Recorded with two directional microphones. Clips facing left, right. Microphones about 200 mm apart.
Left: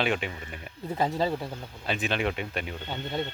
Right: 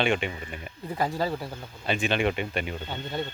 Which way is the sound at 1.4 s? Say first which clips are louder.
Left 1 dB; centre (ahead or behind).